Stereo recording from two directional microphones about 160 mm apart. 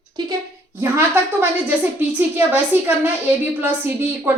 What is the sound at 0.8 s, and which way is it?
Speech, 15° right (ahead or behind).